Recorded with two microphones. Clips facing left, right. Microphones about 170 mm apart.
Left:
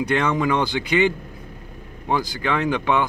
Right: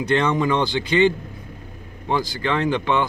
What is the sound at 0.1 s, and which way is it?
Speech, 25° right (ahead or behind).